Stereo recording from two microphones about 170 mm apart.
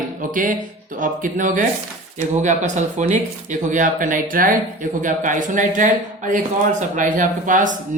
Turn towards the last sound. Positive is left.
turn(degrees=-50)  # may be behind; listen again after turning